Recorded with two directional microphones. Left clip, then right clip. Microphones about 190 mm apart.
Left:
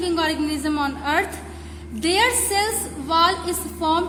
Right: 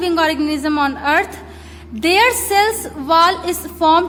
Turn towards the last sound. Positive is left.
turn(degrees=-30)  # may be behind; listen again after turning